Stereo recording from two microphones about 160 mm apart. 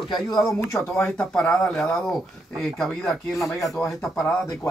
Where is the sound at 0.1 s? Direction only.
25° left (ahead or behind).